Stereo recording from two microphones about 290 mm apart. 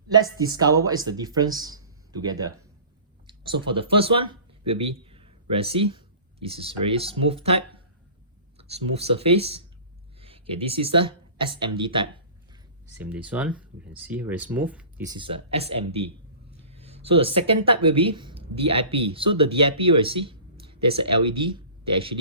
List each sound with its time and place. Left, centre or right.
0.1 s speech: centre
13.0 s a man's voice: centre